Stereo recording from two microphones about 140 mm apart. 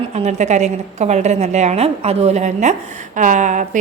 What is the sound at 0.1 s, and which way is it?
A woman's voice, 55° right (ahead or behind).